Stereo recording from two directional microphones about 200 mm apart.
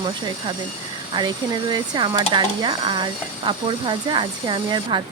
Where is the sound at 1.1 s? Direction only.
20° right (ahead or behind).